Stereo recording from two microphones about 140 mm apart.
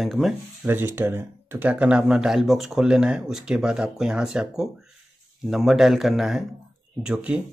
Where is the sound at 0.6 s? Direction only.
15° right (ahead or behind).